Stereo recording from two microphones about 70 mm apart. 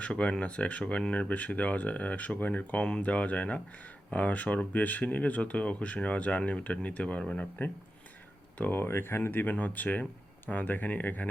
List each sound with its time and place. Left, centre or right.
0.0 s speech: centre
8.5 s speech: left